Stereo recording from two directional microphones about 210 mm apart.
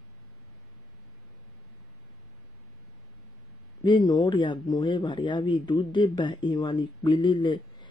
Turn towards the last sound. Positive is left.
turn(degrees=20)  # may be behind; listen again after turning